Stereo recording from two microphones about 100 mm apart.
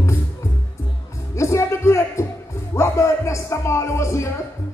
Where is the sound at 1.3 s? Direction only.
30° left (ahead or behind).